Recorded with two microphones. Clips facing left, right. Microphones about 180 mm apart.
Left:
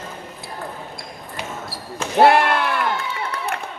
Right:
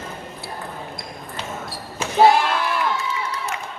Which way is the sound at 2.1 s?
60° left (ahead or behind).